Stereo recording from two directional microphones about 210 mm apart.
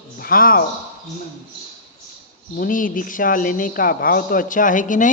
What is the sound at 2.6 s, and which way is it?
A man's voice, 40° left (ahead or behind).